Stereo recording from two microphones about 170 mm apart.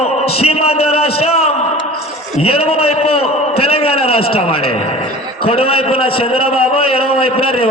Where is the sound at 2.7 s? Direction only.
35° left (ahead or behind).